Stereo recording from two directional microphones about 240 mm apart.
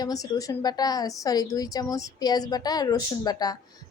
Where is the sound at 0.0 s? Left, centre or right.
Centre.